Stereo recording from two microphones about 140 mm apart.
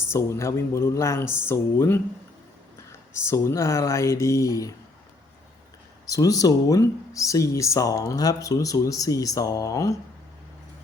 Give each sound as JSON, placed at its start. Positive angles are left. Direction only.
{"t": 0.1, "sound": "speech", "side_deg": 20}
{"t": 3.1, "sound": "speech", "side_deg": 20}
{"t": 6.1, "sound": "speech", "side_deg": 25}